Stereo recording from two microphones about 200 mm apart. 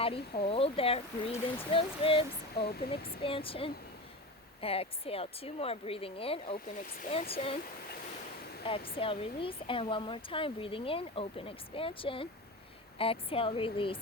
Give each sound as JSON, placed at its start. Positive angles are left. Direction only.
{"t": 0.0, "sound": "speech", "side_deg": 30}
{"t": 2.6, "sound": "speech", "side_deg": 50}
{"t": 3.2, "sound": "speech", "side_deg": 25}
{"t": 8.6, "sound": "speech", "side_deg": 25}